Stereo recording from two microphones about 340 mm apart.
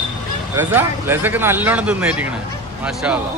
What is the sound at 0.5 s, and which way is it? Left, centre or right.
Speech, centre.